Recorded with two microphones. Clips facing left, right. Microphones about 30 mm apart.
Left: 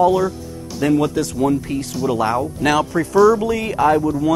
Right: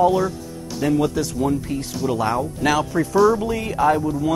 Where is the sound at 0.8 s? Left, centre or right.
Left.